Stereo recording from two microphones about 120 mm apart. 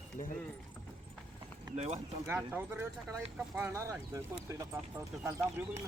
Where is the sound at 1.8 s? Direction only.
65° right (ahead or behind).